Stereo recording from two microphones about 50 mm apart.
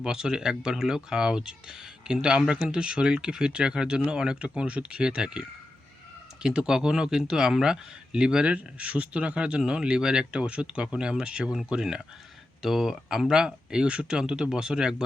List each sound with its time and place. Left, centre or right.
0.0 s speech: centre